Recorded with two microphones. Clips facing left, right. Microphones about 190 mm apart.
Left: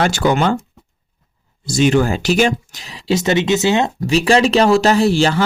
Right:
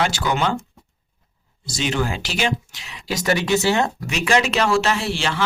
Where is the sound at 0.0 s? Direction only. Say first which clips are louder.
Left 6 dB; 50° left (ahead or behind).